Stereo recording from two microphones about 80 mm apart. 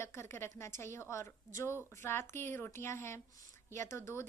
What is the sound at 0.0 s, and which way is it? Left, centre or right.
A woman's voice, left.